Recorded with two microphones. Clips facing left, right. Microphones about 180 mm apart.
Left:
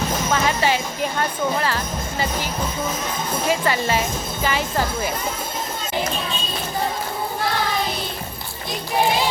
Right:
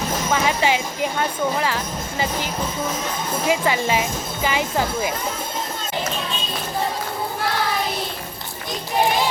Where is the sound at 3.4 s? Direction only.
15° right (ahead or behind).